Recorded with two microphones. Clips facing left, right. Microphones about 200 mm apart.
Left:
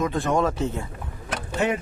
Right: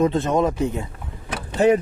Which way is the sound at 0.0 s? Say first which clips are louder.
Right 4 dB; 25° right (ahead or behind).